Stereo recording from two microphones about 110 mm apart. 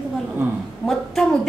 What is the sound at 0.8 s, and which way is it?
Speech, centre (ahead or behind).